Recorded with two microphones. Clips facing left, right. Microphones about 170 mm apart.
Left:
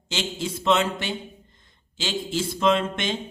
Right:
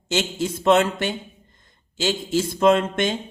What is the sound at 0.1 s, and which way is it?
Speech, 50° right (ahead or behind).